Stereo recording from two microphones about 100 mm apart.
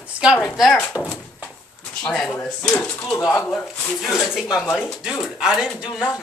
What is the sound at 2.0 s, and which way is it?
Speech, 10° left (ahead or behind).